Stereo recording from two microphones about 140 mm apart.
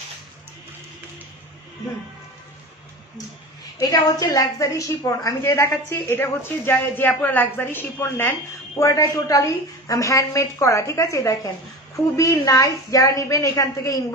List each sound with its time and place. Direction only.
3.8 s a woman's voice: 25° left (ahead or behind)